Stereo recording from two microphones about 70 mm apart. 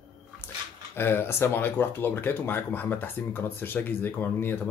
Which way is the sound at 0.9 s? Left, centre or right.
Left.